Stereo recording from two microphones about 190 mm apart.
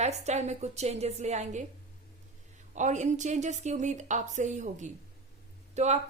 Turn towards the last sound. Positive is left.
turn(degrees=-35)  # may be behind; listen again after turning